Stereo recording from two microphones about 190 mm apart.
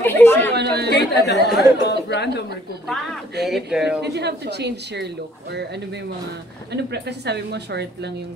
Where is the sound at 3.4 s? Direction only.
60° right (ahead or behind).